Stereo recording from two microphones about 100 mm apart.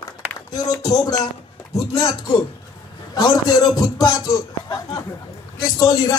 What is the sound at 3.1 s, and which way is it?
A man's voice, 40° left (ahead or behind).